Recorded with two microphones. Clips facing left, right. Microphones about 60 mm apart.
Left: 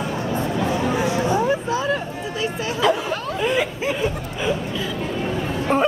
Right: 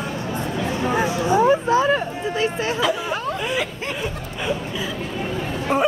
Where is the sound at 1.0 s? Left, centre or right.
Right.